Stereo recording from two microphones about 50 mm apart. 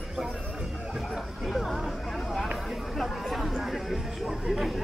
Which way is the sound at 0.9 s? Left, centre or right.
Centre.